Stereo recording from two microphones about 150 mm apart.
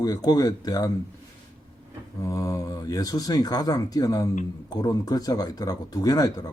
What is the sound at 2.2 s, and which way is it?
Speech, 20° left (ahead or behind).